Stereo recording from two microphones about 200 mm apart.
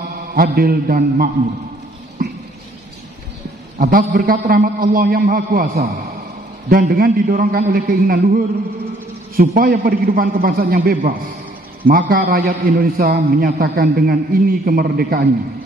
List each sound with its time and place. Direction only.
0.3 s a man's voice: 45° right (ahead or behind)
3.8 s a man's voice: 45° right (ahead or behind)